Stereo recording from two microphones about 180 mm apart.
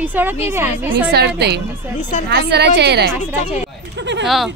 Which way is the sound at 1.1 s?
65° right (ahead or behind).